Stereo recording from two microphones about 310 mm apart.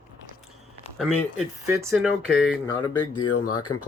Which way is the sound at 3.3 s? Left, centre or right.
Left.